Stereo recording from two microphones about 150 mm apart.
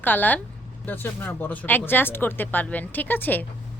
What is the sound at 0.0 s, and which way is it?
Speech, 10° left (ahead or behind).